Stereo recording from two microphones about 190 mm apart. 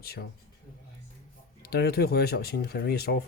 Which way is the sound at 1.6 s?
55° left (ahead or behind).